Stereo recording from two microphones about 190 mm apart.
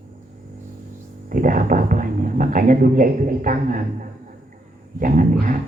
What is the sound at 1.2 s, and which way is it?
Speech, 45° right (ahead or behind).